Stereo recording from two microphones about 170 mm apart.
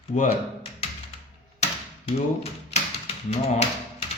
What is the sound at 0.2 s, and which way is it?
Typing, 35° left (ahead or behind).